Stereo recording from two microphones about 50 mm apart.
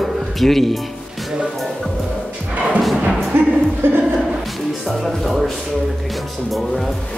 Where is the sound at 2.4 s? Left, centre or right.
Right.